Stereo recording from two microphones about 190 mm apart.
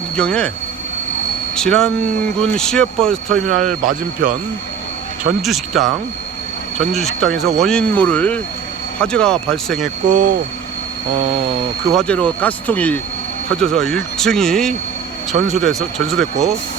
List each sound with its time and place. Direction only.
0.2 s speech: 5° left (ahead or behind)
1.5 s speech: 5° left (ahead or behind)
5.4 s speech: centre (ahead or behind)
10.1 s speech: 45° right (ahead or behind)
11.9 s speech: 5° left (ahead or behind)